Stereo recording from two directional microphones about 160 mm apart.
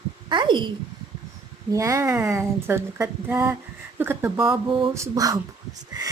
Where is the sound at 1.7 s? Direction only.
20° right (ahead or behind).